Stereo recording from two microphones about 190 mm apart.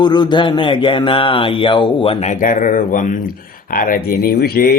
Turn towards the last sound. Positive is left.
turn(degrees=55)  # may be behind; listen again after turning